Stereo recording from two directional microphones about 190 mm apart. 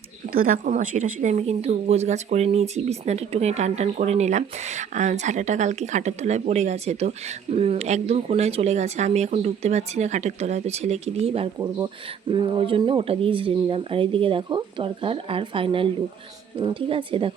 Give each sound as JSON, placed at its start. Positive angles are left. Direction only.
{"t": 0.3, "sound": "speech", "side_deg": -45}